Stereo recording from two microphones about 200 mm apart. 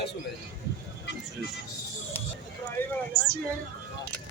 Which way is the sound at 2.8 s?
10° left (ahead or behind).